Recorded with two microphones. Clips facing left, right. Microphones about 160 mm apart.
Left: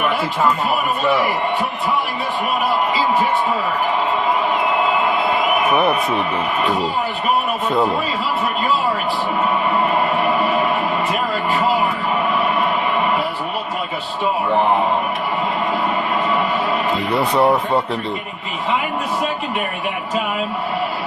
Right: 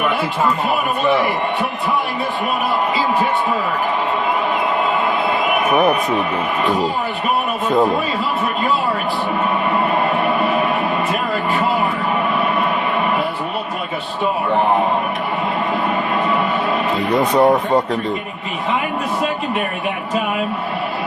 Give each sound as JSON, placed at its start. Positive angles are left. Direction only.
{"t": 17.1, "sound": "speech", "side_deg": -40}